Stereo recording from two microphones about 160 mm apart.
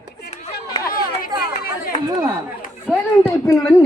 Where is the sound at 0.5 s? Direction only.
65° left (ahead or behind).